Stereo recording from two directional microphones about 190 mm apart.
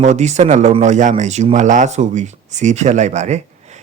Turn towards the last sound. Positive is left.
turn(degrees=-35)  # may be behind; listen again after turning